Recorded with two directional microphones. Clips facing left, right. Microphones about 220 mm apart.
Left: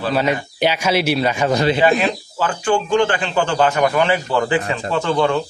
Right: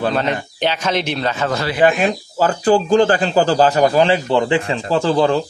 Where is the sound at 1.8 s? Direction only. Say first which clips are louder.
Right 1 dB; 45° right (ahead or behind).